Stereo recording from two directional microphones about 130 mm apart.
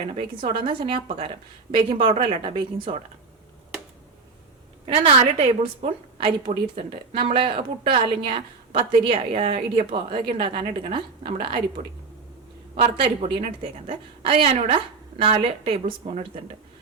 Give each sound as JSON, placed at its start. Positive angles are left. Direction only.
{"t": 0.2, "sound": "a woman's voice", "side_deg": -45}
{"t": 5.2, "sound": "a woman's voice", "side_deg": -50}